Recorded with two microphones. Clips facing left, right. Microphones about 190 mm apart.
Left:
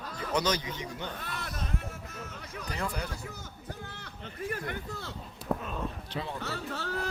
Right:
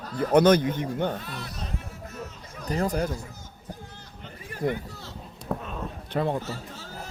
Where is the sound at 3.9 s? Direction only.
70° left (ahead or behind).